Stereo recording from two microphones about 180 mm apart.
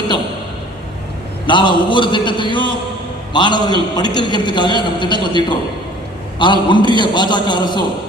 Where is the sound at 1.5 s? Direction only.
25° left (ahead or behind).